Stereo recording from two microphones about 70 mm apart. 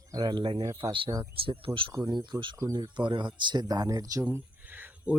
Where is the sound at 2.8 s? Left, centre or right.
Right.